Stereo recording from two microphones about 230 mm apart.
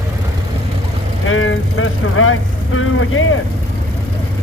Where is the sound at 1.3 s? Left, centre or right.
Left.